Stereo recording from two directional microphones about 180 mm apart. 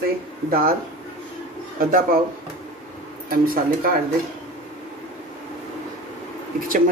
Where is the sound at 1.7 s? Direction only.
50° right (ahead or behind).